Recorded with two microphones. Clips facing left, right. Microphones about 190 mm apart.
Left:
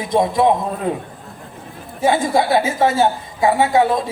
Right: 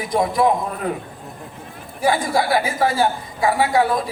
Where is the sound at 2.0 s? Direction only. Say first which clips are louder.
Left 3 dB; 25° left (ahead or behind).